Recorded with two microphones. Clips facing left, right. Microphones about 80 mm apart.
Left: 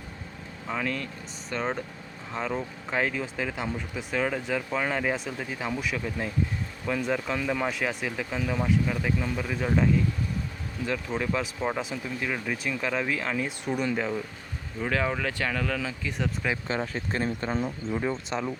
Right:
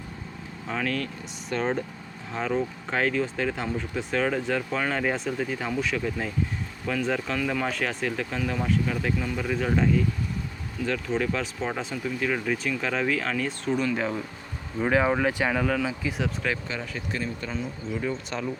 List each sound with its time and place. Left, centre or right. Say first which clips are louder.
0.7 s speech: right 2 dB; centre
13.9 s speech: right 1 dB; centre
14.8 s speech: right 5 dB; centre
16.6 s speech: left 3 dB; left
18.3 s speech: left 1 dB; centre